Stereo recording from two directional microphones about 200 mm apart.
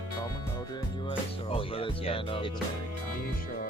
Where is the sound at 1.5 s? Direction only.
30° left (ahead or behind).